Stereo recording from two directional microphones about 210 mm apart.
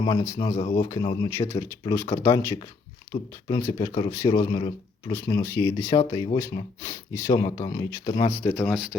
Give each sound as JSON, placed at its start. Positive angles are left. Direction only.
{"t": 0.0, "sound": "speech", "side_deg": 20}
{"t": 6.0, "sound": "speech", "side_deg": 25}